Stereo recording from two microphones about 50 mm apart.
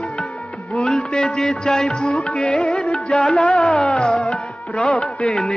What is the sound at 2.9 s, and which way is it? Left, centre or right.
Music, centre.